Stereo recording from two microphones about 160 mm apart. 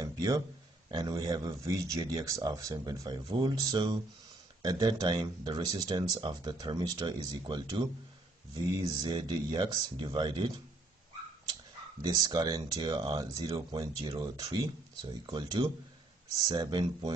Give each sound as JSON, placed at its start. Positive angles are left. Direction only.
{"t": 0.0, "sound": "a sound", "side_deg": -25}
{"t": 0.8, "sound": "speech", "side_deg": -25}
{"t": 9.0, "sound": "speech", "side_deg": -30}
{"t": 12.0, "sound": "speech", "side_deg": -25}